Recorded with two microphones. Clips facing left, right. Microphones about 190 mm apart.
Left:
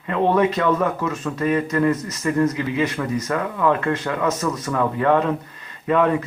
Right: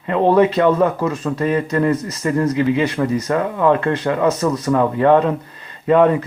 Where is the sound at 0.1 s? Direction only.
35° right (ahead or behind).